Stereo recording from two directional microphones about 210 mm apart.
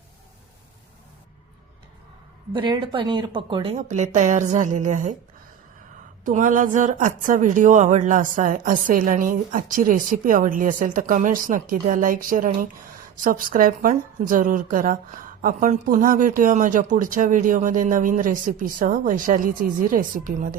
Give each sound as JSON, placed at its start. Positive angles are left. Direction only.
{"t": 2.5, "sound": "a woman's voice", "side_deg": -20}
{"t": 6.2, "sound": "a woman's voice", "side_deg": -40}